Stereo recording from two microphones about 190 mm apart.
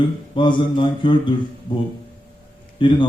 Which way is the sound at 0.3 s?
25° left (ahead or behind).